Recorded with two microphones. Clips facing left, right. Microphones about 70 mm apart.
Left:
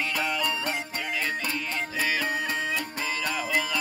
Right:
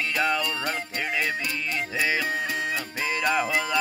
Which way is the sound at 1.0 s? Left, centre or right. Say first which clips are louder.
Right 6 dB; right.